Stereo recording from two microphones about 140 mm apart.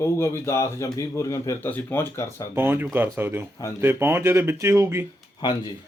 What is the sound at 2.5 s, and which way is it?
Speech, 15° right (ahead or behind).